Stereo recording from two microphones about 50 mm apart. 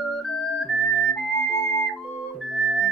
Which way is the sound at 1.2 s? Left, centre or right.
Centre.